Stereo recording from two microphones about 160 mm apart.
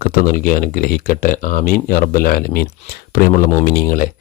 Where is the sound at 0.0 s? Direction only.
65° left (ahead or behind).